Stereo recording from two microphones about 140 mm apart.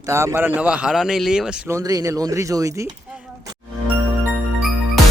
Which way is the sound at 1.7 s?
25° right (ahead or behind).